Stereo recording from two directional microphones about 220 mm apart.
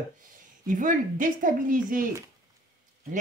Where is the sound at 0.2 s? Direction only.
35° right (ahead or behind).